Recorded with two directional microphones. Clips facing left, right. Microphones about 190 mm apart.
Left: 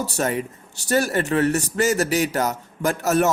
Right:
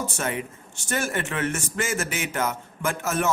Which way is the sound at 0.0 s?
40° left (ahead or behind).